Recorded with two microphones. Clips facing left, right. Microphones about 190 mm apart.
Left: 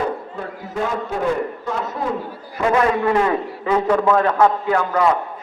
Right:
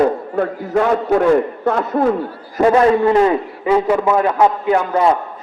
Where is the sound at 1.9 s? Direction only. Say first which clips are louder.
Right 12 dB; 55° right (ahead or behind).